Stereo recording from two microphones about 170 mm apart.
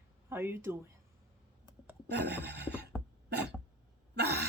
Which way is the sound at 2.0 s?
80° right.